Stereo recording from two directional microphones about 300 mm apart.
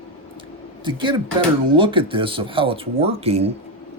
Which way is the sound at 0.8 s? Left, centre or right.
Centre.